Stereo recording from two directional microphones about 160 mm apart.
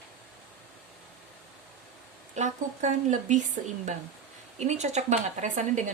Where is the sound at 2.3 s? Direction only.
50° right (ahead or behind).